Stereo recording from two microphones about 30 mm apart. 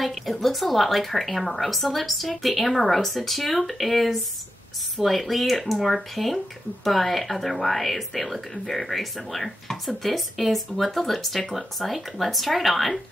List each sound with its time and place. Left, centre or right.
0.0 s speech: centre